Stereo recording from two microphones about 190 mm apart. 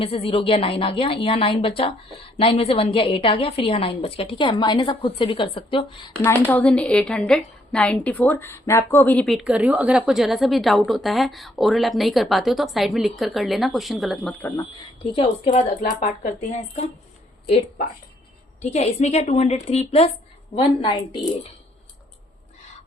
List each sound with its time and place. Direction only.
0.0 s a woman's voice: 30° left (ahead or behind)
6.5 s a woman's voice: 5° left (ahead or behind)
14.6 s a woman's voice: 25° left (ahead or behind)
15.4 s speech: 40° left (ahead or behind)
18.6 s a woman's voice: 35° left (ahead or behind)